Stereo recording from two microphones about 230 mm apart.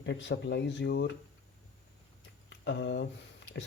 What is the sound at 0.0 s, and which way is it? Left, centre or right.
Speech, left.